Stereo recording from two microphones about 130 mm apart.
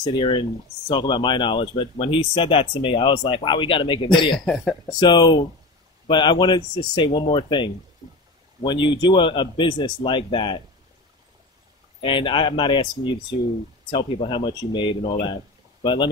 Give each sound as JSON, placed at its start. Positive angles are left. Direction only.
{"t": 0.0, "sound": "speech", "side_deg": 40}
{"t": 12.0, "sound": "speech", "side_deg": 40}